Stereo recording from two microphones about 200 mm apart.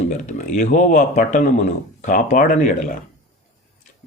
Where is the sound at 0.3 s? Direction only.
40° left (ahead or behind).